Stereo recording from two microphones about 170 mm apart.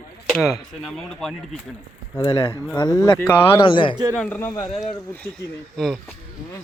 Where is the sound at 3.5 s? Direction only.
30° left (ahead or behind).